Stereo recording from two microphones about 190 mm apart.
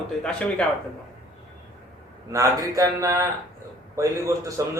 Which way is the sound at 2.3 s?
15° right (ahead or behind).